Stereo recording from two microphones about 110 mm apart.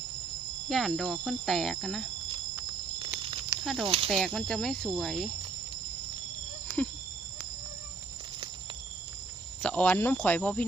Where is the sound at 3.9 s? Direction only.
60° right (ahead or behind).